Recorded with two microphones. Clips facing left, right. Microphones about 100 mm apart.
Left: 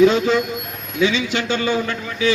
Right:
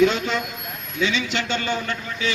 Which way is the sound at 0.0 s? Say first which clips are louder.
Left 5 dB; 45° left (ahead or behind).